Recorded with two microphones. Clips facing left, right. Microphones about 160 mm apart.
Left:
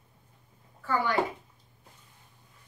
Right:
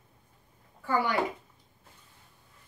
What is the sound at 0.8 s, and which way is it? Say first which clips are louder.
Speech: even; 15° right (ahead or behind).